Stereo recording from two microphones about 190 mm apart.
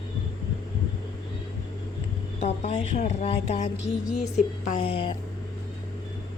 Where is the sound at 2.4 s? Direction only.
35° left (ahead or behind).